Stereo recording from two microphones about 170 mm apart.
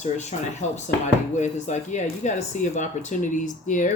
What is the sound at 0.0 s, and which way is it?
Speech, 40° left (ahead or behind).